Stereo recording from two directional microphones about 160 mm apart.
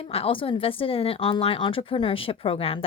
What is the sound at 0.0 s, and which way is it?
Speech, 35° left (ahead or behind).